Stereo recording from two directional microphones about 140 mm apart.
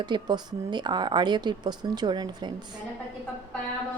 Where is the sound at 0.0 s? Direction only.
30° right (ahead or behind).